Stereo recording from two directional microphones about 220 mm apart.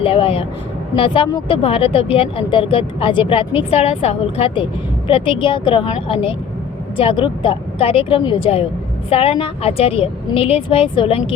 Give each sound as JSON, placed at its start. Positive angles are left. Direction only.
{"t": 0.0, "sound": "speech", "side_deg": 25}